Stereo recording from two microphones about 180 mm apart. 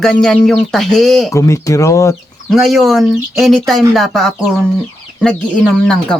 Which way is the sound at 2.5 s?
Centre (ahead or behind).